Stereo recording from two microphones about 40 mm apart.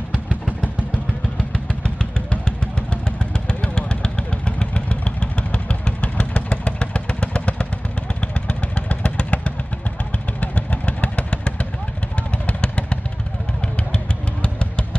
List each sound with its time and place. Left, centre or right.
0.1 s vehicle: right
1.7 s vehicle: left